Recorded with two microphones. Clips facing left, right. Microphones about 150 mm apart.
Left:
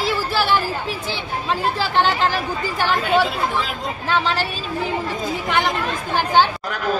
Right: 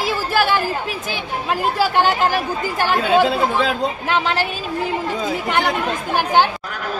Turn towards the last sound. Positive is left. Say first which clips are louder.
# right 1 dB
turn(degrees=-15)  # may be behind; listen again after turning